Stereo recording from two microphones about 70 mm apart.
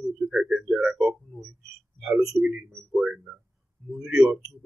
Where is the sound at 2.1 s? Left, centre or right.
Centre.